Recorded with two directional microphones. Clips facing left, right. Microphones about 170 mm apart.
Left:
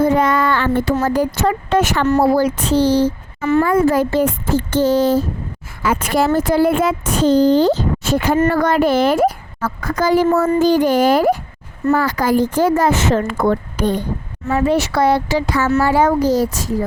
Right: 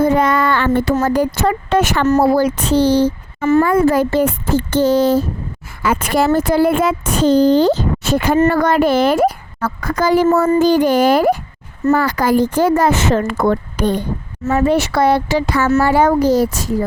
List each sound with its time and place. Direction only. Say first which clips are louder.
0.0 s child singing: right 1 dB; 70° right (ahead or behind)
1.0 s speech: right 1 dB; 70° right (ahead or behind)
3.4 s a woman's voice: right 2 dB; 45° right (ahead or behind)
3.7 s speech: right 1 dB; 65° right (ahead or behind)